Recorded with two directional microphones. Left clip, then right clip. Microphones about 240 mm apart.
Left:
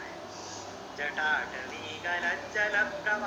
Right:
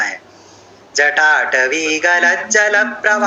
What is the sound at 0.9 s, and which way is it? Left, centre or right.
Music, right.